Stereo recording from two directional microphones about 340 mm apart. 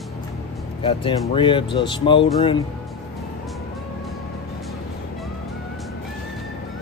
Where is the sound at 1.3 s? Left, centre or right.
Centre.